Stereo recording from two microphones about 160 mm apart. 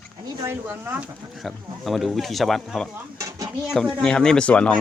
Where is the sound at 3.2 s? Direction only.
20° right (ahead or behind).